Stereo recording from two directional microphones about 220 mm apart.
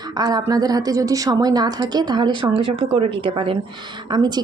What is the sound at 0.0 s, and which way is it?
A woman's voice, 20° right (ahead or behind).